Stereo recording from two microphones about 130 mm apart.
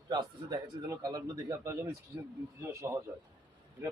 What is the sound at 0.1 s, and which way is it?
A man's voice, 30° right (ahead or behind).